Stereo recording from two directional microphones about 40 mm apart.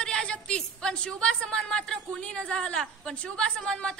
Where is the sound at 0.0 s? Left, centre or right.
Left.